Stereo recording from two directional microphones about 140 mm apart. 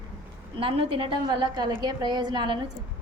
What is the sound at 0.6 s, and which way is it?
A woman's voice, 40° right (ahead or behind).